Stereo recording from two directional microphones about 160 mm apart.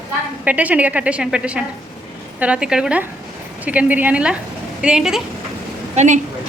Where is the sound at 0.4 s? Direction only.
10° right (ahead or behind).